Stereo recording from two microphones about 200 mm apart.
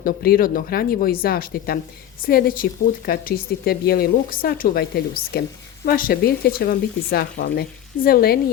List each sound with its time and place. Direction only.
0.0 s speech: 50° left (ahead or behind)